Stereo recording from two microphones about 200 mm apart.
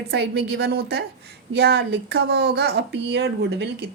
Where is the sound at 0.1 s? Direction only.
55° right (ahead or behind).